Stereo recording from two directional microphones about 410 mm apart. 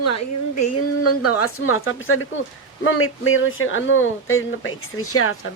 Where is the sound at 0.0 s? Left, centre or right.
Left.